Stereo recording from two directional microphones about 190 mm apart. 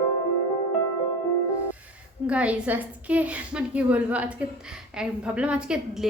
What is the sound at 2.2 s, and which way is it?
A woman's voice, 5° right (ahead or behind).